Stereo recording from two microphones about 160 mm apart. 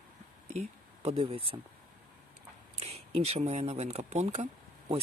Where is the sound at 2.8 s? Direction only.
40° right (ahead or behind).